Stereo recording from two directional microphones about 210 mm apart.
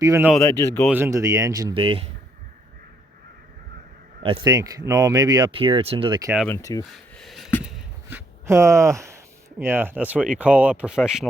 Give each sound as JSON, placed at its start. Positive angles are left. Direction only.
{"t": 0.0, "sound": "speech", "side_deg": -15}
{"t": 0.5, "sound": "speech", "side_deg": 10}
{"t": 0.9, "sound": "speech", "side_deg": -10}
{"t": 4.2, "sound": "speech", "side_deg": -25}
{"t": 6.5, "sound": "speech", "side_deg": 15}
{"t": 7.2, "sound": "a sound", "side_deg": 0}